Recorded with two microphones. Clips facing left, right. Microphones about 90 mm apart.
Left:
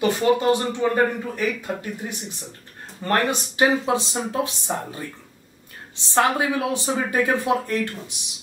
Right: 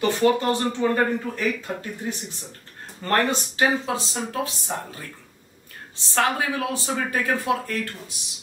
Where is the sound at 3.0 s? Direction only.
20° left (ahead or behind).